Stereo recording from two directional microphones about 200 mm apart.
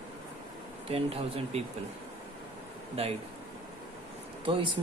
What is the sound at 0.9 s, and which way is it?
Speech, 30° right (ahead or behind).